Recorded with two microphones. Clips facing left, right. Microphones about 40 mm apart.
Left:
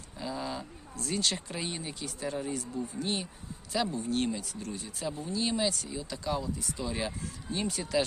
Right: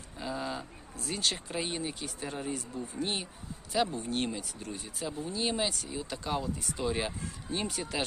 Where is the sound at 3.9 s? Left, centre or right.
Right.